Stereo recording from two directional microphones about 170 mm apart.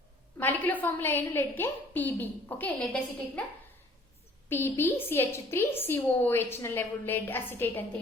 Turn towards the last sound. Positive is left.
turn(degrees=10)  # may be behind; listen again after turning